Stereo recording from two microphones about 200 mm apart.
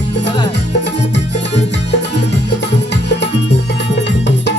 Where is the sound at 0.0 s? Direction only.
55° left (ahead or behind).